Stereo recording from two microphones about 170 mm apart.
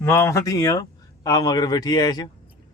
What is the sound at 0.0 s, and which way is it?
Speech, 15° left (ahead or behind).